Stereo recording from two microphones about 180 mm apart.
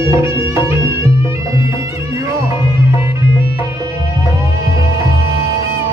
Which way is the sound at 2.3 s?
15° right (ahead or behind).